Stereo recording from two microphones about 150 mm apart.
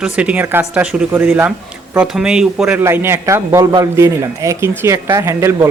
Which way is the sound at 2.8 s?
15° right (ahead or behind).